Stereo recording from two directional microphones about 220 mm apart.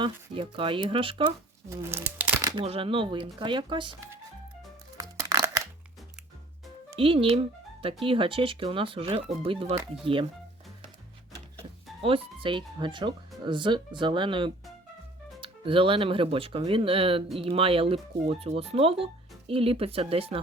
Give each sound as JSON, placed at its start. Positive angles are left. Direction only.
{"t": 0.0, "sound": "speech", "side_deg": -20}
{"t": 1.7, "sound": "speech", "side_deg": -10}
{"t": 4.9, "sound": "music", "side_deg": -15}
{"t": 6.9, "sound": "speech", "side_deg": -25}
{"t": 12.0, "sound": "speech", "side_deg": -25}